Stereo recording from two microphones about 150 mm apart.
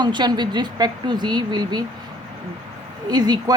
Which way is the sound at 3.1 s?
25° right (ahead or behind).